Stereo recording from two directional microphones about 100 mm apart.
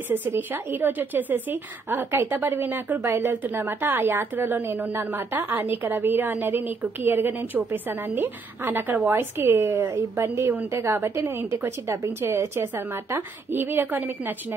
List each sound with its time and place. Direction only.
0.1 s a woman's voice: 20° right (ahead or behind)